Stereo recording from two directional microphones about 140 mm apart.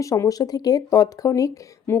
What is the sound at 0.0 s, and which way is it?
Speech, 25° left (ahead or behind).